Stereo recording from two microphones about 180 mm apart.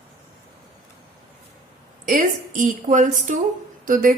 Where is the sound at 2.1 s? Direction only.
45° right (ahead or behind).